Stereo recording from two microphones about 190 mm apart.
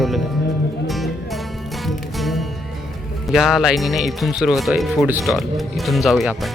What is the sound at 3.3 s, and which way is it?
Speech, centre (ahead or behind).